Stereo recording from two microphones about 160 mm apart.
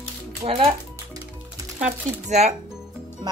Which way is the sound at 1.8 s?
45° right (ahead or behind).